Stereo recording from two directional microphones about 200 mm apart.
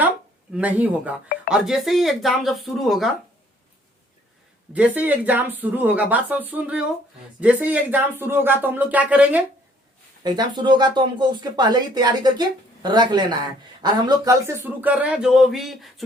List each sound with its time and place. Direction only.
0.5 s speech: 5° right (ahead or behind)
4.7 s speech: 5° right (ahead or behind)
10.2 s speech: 20° right (ahead or behind); by 16.0 s centre (ahead or behind)